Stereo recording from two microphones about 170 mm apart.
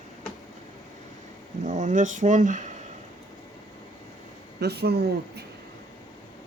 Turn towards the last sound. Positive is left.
turn(degrees=-70)  # may be behind; listen again after turning